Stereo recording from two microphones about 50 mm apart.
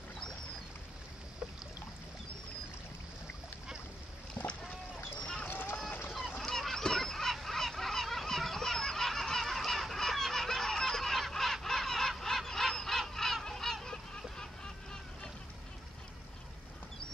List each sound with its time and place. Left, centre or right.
5.2 s a sound: centre
5.5 s run: left
6.3 s goose: centre
13.1 s honk: centre